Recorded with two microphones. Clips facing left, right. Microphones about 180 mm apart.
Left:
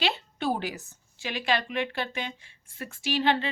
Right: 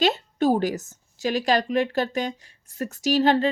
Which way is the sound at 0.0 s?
45° right (ahead or behind).